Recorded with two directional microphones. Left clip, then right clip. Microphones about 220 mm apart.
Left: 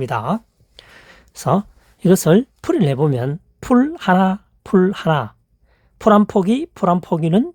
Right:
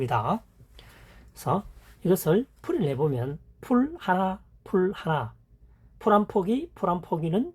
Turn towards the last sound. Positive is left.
turn(degrees=50)  # may be behind; listen again after turning